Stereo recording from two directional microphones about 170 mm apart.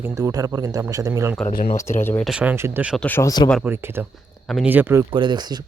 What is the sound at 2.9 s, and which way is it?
Speech, 10° left (ahead or behind).